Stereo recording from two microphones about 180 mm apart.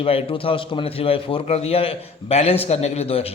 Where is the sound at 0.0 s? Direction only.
30° left (ahead or behind).